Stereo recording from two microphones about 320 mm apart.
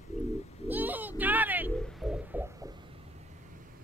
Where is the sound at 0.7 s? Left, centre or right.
Centre.